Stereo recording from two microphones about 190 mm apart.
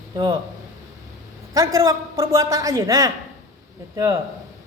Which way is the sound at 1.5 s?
20° right (ahead or behind).